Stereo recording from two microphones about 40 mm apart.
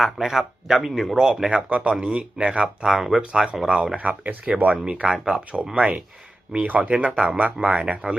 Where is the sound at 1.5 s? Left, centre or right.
Right.